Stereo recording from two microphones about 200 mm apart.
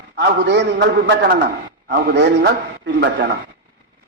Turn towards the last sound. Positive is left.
turn(degrees=-60)  # may be behind; listen again after turning